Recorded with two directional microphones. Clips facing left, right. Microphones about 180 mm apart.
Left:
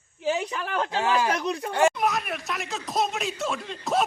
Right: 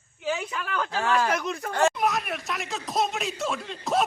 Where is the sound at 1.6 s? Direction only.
10° left (ahead or behind).